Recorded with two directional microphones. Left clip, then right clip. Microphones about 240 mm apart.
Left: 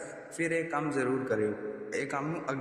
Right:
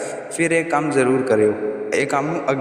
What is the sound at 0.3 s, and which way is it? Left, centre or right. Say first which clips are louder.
A man's voice: right 12 dB; right.